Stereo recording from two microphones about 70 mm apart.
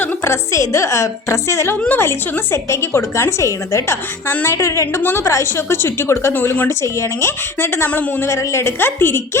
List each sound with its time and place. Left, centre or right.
0.3 s a woman's voice: left
8.3 s a woman's voice: left